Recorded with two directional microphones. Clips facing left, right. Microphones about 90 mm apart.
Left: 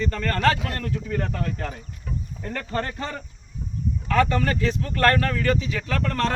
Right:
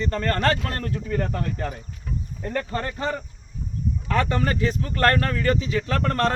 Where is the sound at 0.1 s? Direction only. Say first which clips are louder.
Right 1 dB; 35° right (ahead or behind).